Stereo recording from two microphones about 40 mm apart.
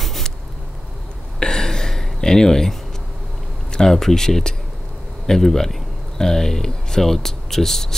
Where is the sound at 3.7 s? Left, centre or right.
Centre.